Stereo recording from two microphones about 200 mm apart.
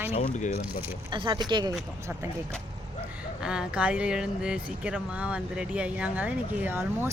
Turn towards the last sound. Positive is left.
turn(degrees=-10)  # may be behind; listen again after turning